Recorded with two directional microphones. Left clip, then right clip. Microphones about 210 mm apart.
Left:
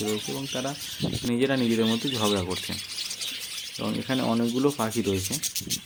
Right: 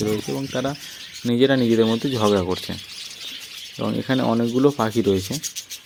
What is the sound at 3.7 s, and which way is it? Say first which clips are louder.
Speech: right 6 dB; 20° right (ahead or behind).